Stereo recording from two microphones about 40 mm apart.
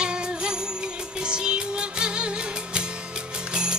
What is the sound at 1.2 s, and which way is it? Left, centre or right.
Music, right.